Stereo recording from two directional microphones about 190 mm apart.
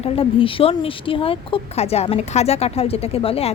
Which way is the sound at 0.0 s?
30° left (ahead or behind).